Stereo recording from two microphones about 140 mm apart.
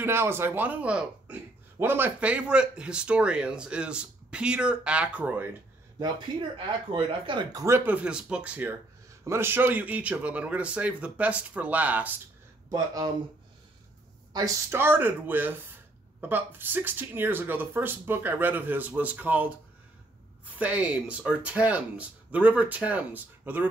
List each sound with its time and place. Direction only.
0.0 s speech: 15° right (ahead or behind)
6.9 s speech: 40° right (ahead or behind)
7.6 s speech: 15° right (ahead or behind)
12.7 s speech: 25° right (ahead or behind)
14.3 s speech: 20° right (ahead or behind)